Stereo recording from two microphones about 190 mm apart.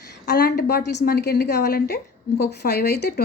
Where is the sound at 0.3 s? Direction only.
55° left (ahead or behind).